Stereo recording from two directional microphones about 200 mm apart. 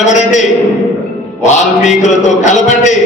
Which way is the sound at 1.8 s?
35° left (ahead or behind).